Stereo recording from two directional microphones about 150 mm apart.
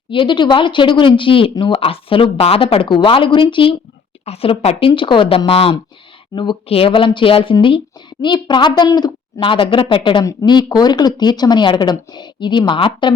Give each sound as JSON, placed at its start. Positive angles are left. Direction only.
{"t": 0.1, "sound": "a woman's voice", "side_deg": 35}